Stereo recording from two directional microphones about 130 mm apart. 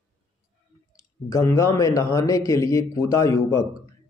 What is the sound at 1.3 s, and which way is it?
A man's voice, 25° left (ahead or behind).